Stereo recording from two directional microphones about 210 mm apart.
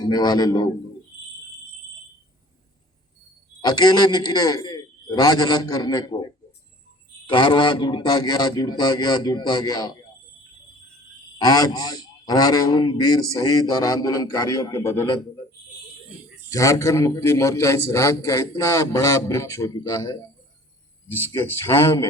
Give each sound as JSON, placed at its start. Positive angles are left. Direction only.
{"t": 0.0, "sound": "a man's voice", "side_deg": 20}
{"t": 3.7, "sound": "a man's voice", "side_deg": 20}
{"t": 11.3, "sound": "a man's voice", "side_deg": 20}
{"t": 16.5, "sound": "a man's voice", "side_deg": 15}